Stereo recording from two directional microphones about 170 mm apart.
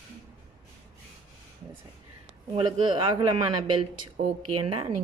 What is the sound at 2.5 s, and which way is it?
Speech, 30° right (ahead or behind).